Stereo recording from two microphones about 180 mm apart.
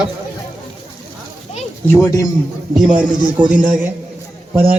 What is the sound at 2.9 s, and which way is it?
Speech, 5° right (ahead or behind).